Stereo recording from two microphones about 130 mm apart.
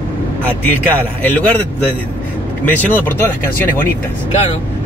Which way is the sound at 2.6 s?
15° left (ahead or behind).